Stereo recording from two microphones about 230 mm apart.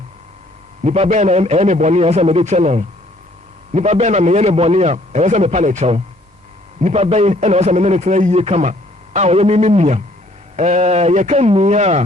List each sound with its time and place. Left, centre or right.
0.9 s a man's voice: right